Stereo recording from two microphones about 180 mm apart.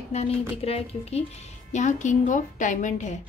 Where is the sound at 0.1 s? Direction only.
35° left (ahead or behind).